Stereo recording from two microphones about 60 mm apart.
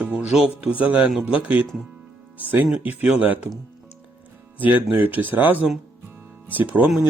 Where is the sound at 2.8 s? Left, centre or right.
Right.